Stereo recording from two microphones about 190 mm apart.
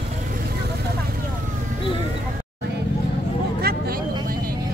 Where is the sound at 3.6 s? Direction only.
50° right (ahead or behind).